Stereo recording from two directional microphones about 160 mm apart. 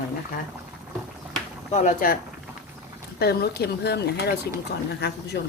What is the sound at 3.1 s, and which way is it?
Speech, 85° left.